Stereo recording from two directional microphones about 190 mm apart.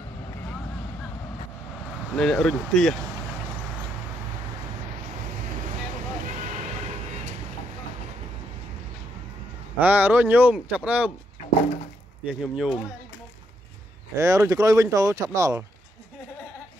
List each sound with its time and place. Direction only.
2.1 s speech: 5° left (ahead or behind)
6.2 s a sound: 40° right (ahead or behind)
9.8 s speech: 10° right (ahead or behind)
12.3 s speech: 5° right (ahead or behind)
14.1 s speech: 15° right (ahead or behind)